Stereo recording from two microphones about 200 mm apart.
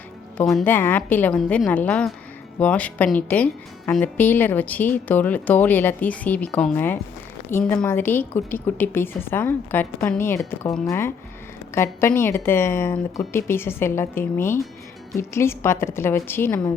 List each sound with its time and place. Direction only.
0.3 s speech: 5° left (ahead or behind)